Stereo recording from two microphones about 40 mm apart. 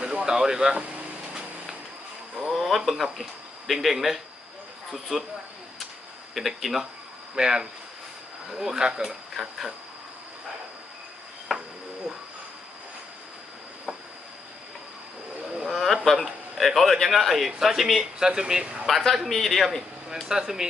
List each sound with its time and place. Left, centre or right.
0.0 s speech: centre
2.5 s a man's voice: centre
6.3 s a man's voice: centre
7.3 s speech: centre
9.0 s speech: centre
11.5 s insect: centre
15.5 s a sound: centre
16.0 s a man's voice: centre
18.2 s speech: centre
18.9 s a man's voice: centre
20.2 s speech: centre